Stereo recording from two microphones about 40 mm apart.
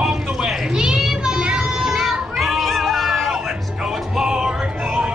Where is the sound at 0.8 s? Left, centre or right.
Centre.